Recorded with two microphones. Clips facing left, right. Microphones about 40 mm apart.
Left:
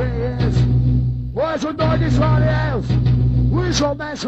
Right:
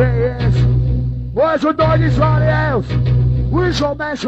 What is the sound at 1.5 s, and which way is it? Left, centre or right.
Music, right.